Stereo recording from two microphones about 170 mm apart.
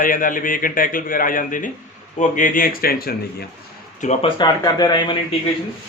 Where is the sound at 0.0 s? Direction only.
55° left (ahead or behind).